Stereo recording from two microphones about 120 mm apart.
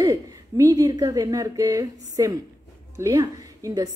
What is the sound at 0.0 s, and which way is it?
A woman's voice, 30° right (ahead or behind).